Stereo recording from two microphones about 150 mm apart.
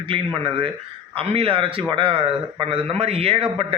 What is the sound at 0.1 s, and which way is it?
A man's voice, 35° right (ahead or behind).